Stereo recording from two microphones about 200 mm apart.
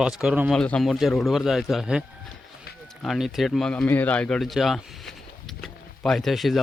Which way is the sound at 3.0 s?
Centre (ahead or behind).